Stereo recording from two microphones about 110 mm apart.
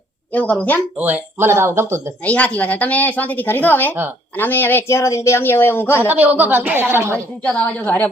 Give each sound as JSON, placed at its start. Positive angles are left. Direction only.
{"t": 0.3, "sound": "speech", "side_deg": 10}
{"t": 0.9, "sound": "speech", "side_deg": -15}
{"t": 2.2, "sound": "speech", "side_deg": 10}
{"t": 6.1, "sound": "a woman's voice", "side_deg": -15}
{"t": 7.4, "sound": "speech", "side_deg": 10}